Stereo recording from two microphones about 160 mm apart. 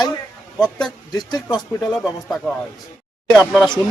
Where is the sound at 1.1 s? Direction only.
25° left (ahead or behind).